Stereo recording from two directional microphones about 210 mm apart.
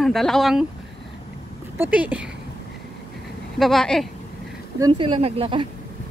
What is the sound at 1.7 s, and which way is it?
Speech, 10° right (ahead or behind).